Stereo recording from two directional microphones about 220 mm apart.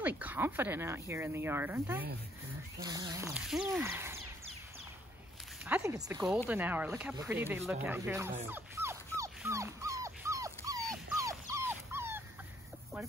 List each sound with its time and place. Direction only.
0.2 s speech: 10° right (ahead or behind)
3.3 s speech: centre (ahead or behind)
5.7 s speech: 15° right (ahead or behind)
8.5 s dog: 10° right (ahead or behind)